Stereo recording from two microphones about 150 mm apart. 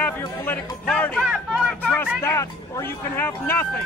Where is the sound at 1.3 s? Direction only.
5° right (ahead or behind).